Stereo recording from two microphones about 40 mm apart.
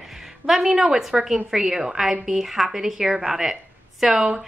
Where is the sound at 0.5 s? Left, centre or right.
Centre.